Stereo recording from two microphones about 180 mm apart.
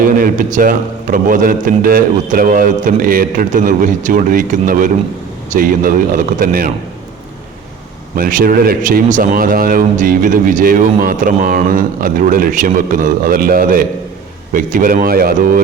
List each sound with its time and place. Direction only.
0.0 s a man's voice: 50° right (ahead or behind)
8.1 s a man's voice: 50° right (ahead or behind)